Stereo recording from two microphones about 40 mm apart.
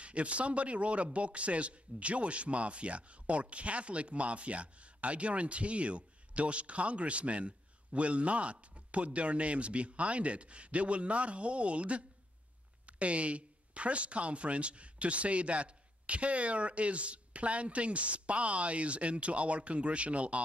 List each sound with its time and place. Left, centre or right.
0.0 s speech: right